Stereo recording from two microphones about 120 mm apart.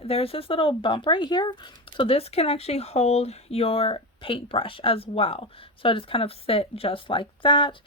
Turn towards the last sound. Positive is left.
turn(degrees=40)  # may be behind; listen again after turning